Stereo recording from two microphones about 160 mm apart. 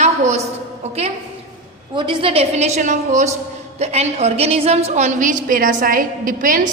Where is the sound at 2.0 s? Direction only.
30° right (ahead or behind).